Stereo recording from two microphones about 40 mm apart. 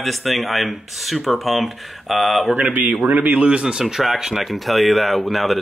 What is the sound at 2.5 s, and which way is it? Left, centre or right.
Speech, right.